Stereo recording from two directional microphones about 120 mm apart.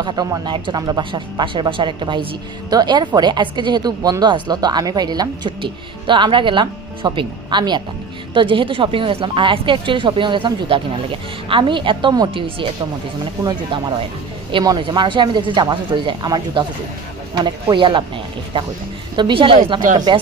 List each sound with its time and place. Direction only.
0.0 s speech: 40° right (ahead or behind)
13.7 s speech: 40° right (ahead or behind)
19.1 s speech: 45° right (ahead or behind)